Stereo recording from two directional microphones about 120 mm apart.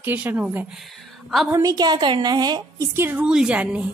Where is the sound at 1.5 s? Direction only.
30° right (ahead or behind).